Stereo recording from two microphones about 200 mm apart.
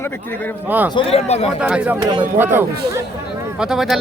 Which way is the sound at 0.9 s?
30° left (ahead or behind).